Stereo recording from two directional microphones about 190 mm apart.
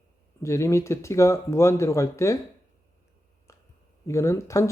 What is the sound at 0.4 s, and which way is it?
Speech, 15° left (ahead or behind).